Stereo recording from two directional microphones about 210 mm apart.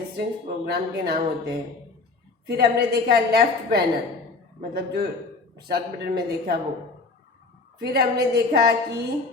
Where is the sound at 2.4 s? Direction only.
50° right (ahead or behind).